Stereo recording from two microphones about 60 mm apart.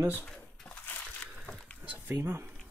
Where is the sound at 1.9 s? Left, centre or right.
Right.